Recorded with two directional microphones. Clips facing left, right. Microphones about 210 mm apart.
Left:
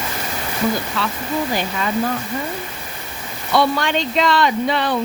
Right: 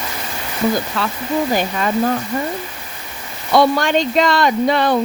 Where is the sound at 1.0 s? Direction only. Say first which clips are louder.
Right 2 dB; 45° right (ahead or behind).